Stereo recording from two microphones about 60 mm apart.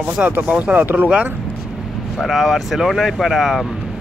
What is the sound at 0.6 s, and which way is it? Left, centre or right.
Speech, right.